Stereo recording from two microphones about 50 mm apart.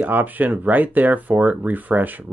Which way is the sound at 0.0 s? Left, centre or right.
Right.